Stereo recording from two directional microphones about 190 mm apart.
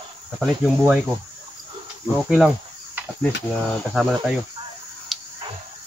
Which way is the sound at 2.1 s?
Centre (ahead or behind).